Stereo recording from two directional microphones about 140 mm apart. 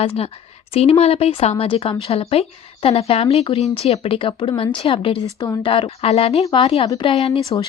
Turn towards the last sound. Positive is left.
turn(degrees=40)  # may be behind; listen again after turning